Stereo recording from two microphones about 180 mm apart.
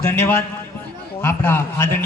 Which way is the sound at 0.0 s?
15° left (ahead or behind).